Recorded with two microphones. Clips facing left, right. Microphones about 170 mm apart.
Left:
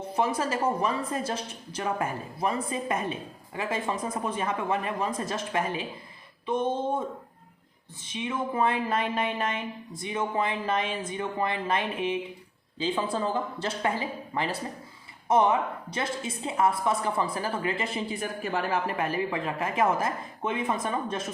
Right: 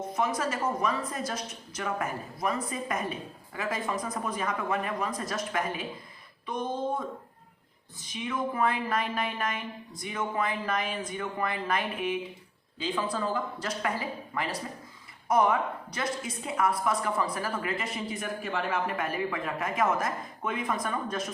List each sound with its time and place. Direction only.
0.1 s a woman's voice: 30° left (ahead or behind)
8.0 s a woman's voice: 25° left (ahead or behind)